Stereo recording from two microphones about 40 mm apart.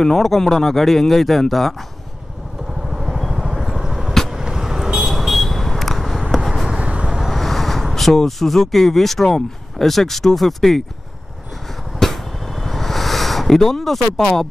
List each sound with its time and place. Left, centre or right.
0.0 s speech: centre
2.9 s vehicle: centre
6.3 s a sound: centre
6.7 s vehicle: right
7.2 s speech: centre
12.0 s a sound: centre